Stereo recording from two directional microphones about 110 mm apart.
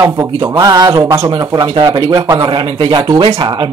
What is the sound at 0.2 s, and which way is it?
Speech, 35° right (ahead or behind).